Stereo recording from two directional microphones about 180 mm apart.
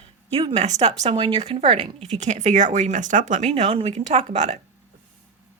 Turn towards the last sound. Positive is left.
turn(degrees=-35)  # may be behind; listen again after turning